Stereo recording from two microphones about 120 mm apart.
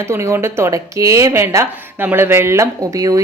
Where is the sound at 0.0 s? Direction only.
25° right (ahead or behind).